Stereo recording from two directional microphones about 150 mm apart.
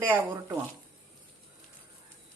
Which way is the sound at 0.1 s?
15° right (ahead or behind).